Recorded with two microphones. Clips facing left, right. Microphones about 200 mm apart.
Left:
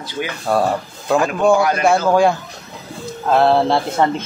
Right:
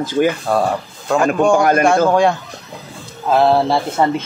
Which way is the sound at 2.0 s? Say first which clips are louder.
Even; centre (ahead or behind).